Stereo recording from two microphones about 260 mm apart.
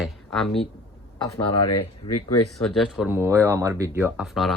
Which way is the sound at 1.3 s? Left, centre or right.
Left.